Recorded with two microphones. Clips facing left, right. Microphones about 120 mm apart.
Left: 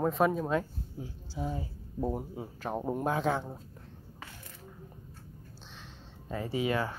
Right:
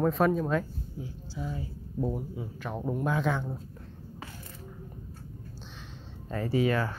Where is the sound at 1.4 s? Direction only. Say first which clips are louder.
Left 1 dB; 35° left (ahead or behind).